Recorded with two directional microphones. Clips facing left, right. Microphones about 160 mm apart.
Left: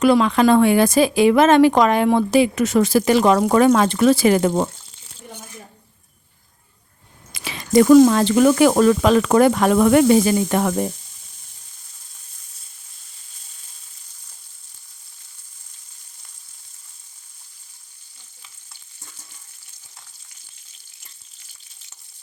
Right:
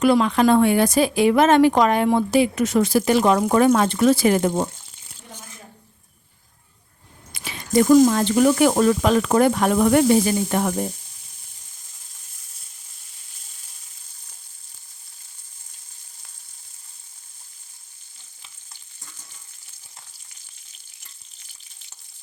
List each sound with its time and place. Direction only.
0.0 s speech: 90° left
7.3 s speech: 90° left